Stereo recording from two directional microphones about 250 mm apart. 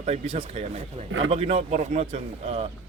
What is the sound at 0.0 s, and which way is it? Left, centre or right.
Speech, right.